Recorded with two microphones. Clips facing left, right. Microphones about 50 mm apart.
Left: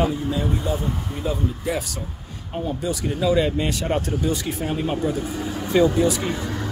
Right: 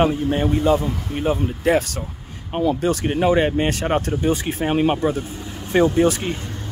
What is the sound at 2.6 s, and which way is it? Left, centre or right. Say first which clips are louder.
Speech: right 6 dB; right.